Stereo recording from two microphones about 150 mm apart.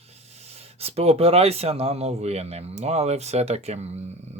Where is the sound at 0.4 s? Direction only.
45° right (ahead or behind).